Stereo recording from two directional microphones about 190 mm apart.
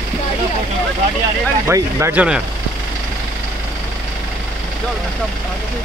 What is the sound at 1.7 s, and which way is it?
Speech, 15° right (ahead or behind).